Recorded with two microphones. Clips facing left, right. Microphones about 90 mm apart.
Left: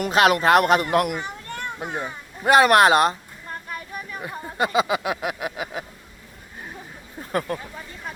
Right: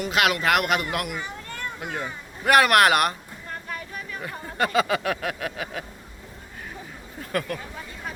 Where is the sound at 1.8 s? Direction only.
20° left (ahead or behind).